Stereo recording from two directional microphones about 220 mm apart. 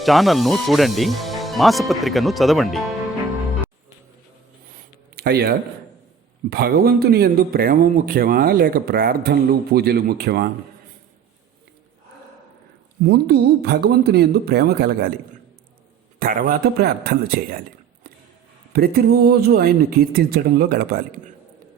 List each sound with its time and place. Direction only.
0.0 s speech: centre (ahead or behind)
5.1 s a man's voice: 45° right (ahead or behind)
13.1 s a man's voice: 50° right (ahead or behind)
16.1 s speech: 40° right (ahead or behind)
18.7 s a man's voice: 45° right (ahead or behind)